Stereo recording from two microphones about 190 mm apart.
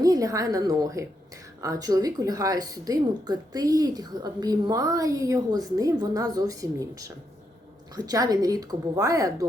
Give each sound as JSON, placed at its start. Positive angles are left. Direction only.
{"t": 0.0, "sound": "a woman's voice", "side_deg": -20}